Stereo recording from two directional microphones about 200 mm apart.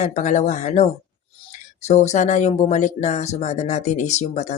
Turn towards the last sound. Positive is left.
turn(degrees=35)  # may be behind; listen again after turning